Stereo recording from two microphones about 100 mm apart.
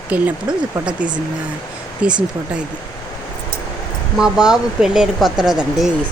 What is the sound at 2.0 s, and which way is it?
Speech, 10° right (ahead or behind).